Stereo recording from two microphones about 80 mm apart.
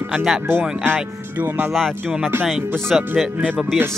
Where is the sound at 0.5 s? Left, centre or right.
Right.